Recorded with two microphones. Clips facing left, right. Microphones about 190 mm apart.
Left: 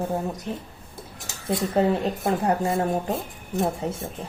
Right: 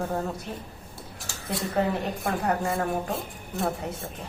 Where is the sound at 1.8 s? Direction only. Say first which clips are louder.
Left 4 dB; 25° left (ahead or behind).